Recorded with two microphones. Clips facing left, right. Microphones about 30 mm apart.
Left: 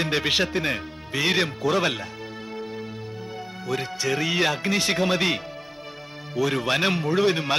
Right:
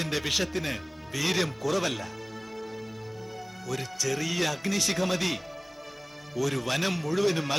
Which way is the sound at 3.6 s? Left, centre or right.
Left.